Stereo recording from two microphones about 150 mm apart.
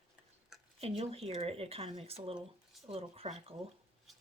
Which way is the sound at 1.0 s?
45° right (ahead or behind).